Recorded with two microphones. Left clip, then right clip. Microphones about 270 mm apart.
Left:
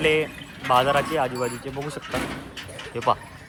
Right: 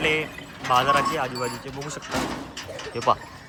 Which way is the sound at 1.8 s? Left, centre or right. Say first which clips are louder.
Right 1 dB; right.